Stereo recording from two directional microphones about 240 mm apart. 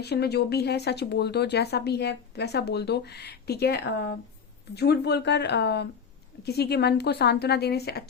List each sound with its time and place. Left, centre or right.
0.0 s speech: left